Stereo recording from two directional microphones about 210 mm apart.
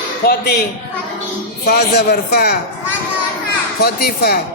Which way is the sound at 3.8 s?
50° left (ahead or behind).